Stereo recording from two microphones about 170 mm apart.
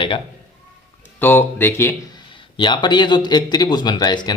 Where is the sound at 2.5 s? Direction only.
25° left (ahead or behind).